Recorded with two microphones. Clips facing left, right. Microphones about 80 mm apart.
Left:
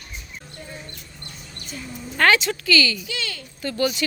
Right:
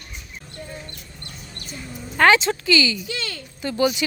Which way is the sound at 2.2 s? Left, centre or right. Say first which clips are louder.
Right 3 dB; right.